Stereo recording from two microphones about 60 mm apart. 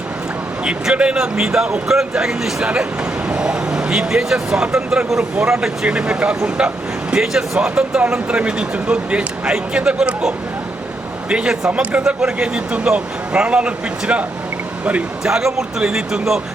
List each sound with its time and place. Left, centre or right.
0.6 s speech: centre
7.1 s speech: centre
15.2 s speech: centre